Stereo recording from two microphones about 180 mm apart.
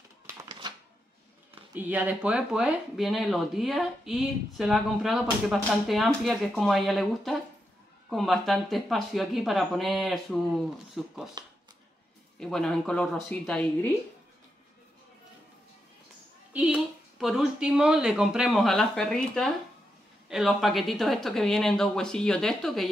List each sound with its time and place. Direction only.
0.5 s shuffling cards: 25° right (ahead or behind)
1.7 s speech: 10° right (ahead or behind)
11.4 s speech: 20° right (ahead or behind)
12.4 s speech: 5° left (ahead or behind)
16.5 s speech: 5° right (ahead or behind)